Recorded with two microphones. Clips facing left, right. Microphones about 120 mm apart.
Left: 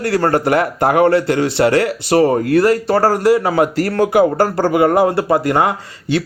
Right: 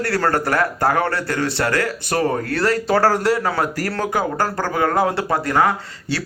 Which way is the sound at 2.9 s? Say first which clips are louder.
Left 4 dB; 5° left (ahead or behind).